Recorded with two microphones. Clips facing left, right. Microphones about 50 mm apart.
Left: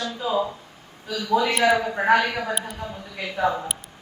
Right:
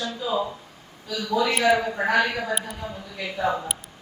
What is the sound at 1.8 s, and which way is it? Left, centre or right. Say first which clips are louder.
Speech: left 1 dB; left.